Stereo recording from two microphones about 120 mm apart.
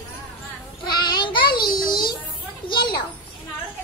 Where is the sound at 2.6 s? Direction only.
40° left (ahead or behind).